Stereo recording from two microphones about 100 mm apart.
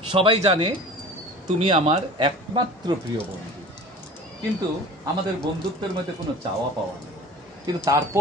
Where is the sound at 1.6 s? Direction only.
70° right (ahead or behind).